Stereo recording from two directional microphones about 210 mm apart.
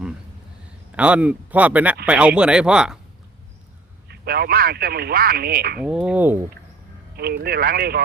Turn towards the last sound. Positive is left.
turn(degrees=-50)  # may be behind; listen again after turning